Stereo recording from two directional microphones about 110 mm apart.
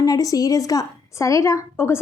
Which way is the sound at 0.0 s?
35° left (ahead or behind).